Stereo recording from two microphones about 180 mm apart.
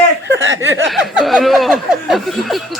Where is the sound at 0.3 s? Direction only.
90° right.